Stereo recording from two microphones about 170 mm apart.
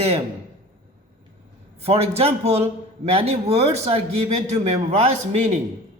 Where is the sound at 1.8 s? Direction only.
35° right (ahead or behind).